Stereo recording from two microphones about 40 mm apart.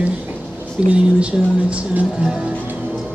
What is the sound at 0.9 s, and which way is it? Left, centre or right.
Speech, right.